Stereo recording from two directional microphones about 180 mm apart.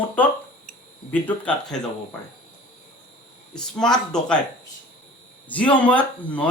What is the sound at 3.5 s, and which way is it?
Speech, 5° left (ahead or behind).